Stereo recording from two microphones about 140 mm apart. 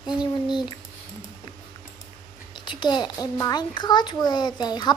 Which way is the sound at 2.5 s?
35° left (ahead or behind).